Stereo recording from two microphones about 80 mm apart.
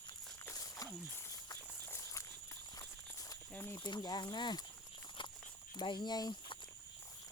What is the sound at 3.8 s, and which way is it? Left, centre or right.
Speech, left.